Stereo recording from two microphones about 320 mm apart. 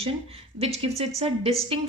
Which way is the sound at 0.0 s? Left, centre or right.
Centre.